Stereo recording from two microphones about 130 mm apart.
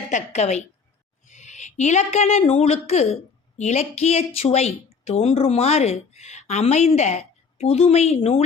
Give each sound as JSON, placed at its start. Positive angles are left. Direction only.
{"t": 0.1, "sound": "speech", "side_deg": 60}